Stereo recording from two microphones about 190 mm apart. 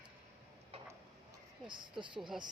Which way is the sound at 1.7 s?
25° right (ahead or behind).